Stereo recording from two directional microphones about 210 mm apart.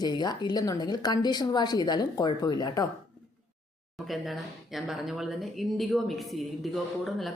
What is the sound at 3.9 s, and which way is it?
Speech, centre (ahead or behind).